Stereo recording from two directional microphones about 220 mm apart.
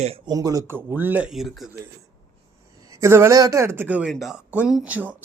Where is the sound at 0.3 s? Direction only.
15° right (ahead or behind); by 1.7 s centre (ahead or behind).